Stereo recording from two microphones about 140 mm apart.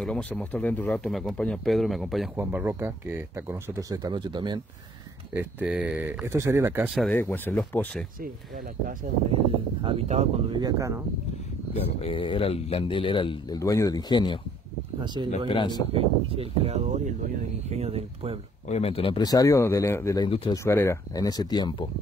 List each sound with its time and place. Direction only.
0.0 s speech: 5° left (ahead or behind)
2.3 s speech: 15° right (ahead or behind); by 4.6 s 35° right (ahead or behind)
5.3 s speech: 10° right (ahead or behind)
7.1 s speech: 15° left (ahead or behind)
9.3 s speech: 40° right (ahead or behind)
10.5 s speech: 25° right (ahead or behind)
11.7 s speech: 45° left (ahead or behind)
13.6 s speech: 25° left (ahead or behind)
15.4 s speech: 35° left (ahead or behind)
15.9 s speech: 45° right (ahead or behind)
18.7 s speech: 45° left (ahead or behind)
19.1 s speech: 25° left (ahead or behind)
20.2 s speech: 40° left (ahead or behind)
20.5 s speech: 20° left (ahead or behind)